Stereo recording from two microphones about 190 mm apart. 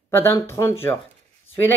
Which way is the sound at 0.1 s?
10° left (ahead or behind).